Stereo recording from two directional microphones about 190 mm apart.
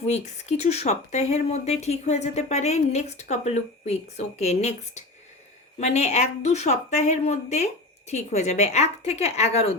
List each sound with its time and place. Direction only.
0.0 s speech: 35° left (ahead or behind)